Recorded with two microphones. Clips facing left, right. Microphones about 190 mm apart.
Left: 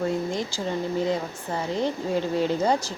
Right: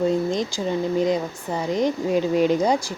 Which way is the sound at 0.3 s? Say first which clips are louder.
Right 4 dB; 15° right (ahead or behind).